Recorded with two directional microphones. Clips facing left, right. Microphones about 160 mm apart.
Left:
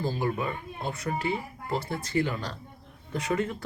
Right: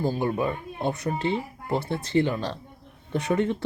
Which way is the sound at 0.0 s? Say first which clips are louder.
Right 4 dB; 20° right (ahead or behind).